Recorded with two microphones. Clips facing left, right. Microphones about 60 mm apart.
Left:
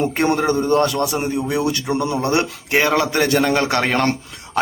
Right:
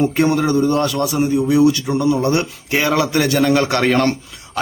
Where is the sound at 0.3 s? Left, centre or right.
Left.